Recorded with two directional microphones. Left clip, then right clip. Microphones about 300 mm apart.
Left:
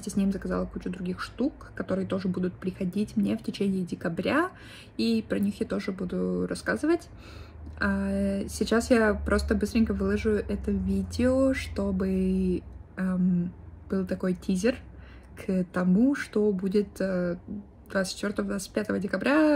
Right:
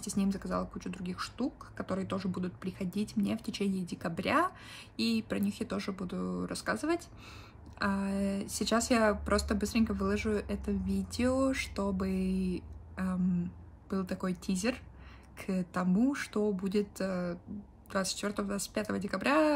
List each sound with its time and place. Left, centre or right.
0.0 s speech: centre